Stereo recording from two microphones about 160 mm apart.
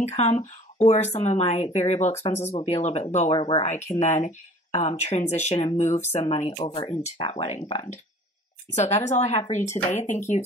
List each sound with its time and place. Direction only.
0.0 s speech: 45° left (ahead or behind)
3.3 s speech: 30° left (ahead or behind)
3.6 s speech: 45° left (ahead or behind)
7.6 s speech: 25° left (ahead or behind)
8.7 s speech: 45° left (ahead or behind)